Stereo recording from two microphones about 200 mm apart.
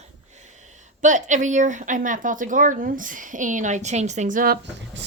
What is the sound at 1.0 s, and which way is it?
Speech, 40° right (ahead or behind).